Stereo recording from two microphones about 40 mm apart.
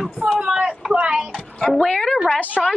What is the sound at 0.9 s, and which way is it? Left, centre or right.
Speech, right.